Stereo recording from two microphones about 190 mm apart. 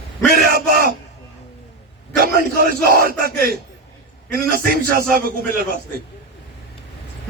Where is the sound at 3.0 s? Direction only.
50° right (ahead or behind).